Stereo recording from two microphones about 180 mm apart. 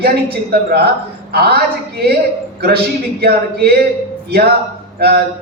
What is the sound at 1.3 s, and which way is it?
Speech, 60° right (ahead or behind).